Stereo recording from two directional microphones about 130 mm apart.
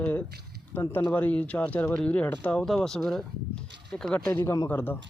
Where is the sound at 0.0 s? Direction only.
10° left (ahead or behind).